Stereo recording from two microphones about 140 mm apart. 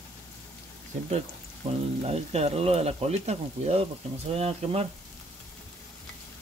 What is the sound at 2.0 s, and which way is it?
Speech, 50° right (ahead or behind).